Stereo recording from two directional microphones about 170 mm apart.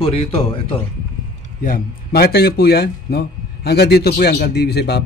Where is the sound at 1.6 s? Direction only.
60° left (ahead or behind).